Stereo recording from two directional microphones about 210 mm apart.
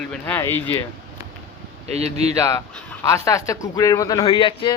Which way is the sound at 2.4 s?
15° left (ahead or behind).